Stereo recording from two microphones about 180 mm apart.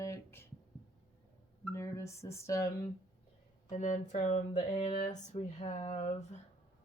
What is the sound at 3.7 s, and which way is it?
Speech, 40° left (ahead or behind).